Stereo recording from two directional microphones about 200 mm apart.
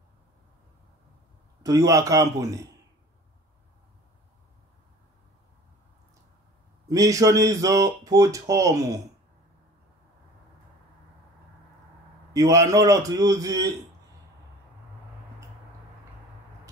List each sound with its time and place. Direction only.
1.6 s speech: 15° right (ahead or behind)
6.9 s speech: 15° right (ahead or behind)
12.4 s speech: 15° right (ahead or behind)